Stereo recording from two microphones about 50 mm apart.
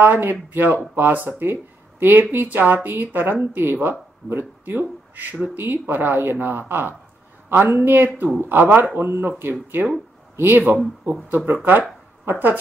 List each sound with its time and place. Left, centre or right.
0.0 s speech: right